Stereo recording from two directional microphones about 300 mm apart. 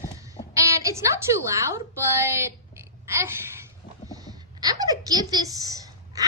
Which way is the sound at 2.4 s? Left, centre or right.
Centre.